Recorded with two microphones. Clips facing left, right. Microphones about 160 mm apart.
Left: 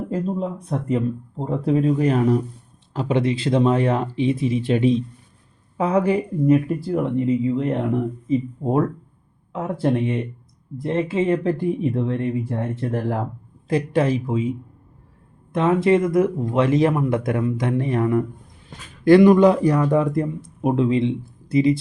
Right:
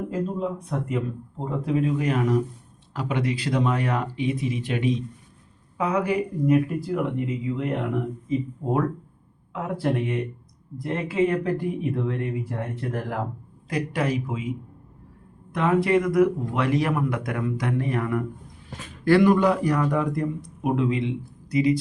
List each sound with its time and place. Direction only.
0.1 s speech: 30° left (ahead or behind)
9.5 s speech: 25° left (ahead or behind)
15.5 s speech: 25° left (ahead or behind)